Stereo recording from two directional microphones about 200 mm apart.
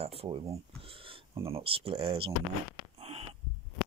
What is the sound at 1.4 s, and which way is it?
Speech, 30° right (ahead or behind).